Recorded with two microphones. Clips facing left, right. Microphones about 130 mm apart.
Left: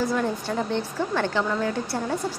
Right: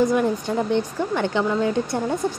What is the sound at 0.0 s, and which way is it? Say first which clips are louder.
A woman's voice: right 5 dB; 15° right (ahead or behind).